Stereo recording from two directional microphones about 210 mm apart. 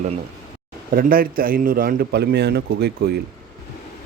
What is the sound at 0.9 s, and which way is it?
A man's voice, 45° right (ahead or behind).